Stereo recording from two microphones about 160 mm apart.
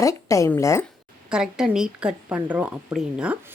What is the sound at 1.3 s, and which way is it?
Speech, 5° right (ahead or behind).